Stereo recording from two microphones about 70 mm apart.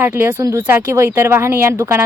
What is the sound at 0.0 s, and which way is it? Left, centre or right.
A woman's voice, right.